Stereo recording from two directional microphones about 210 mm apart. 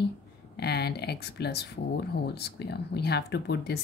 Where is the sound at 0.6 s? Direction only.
50° left (ahead or behind).